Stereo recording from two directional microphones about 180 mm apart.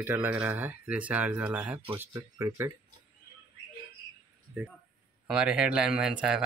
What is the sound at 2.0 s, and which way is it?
Speech, 20° right (ahead or behind).